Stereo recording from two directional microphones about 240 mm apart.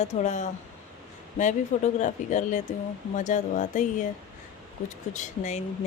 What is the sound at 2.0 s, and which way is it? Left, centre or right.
Speech, left.